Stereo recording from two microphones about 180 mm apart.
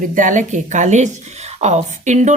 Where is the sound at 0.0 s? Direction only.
45° right (ahead or behind).